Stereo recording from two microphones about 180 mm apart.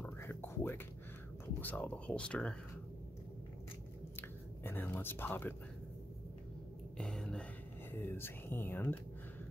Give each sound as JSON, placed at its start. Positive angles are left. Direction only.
{"t": 0.0, "sound": "music", "side_deg": 10}
{"t": 1.6, "sound": "speech", "side_deg": 10}
{"t": 4.2, "sound": "speech", "side_deg": 10}
{"t": 7.0, "sound": "speech", "side_deg": 5}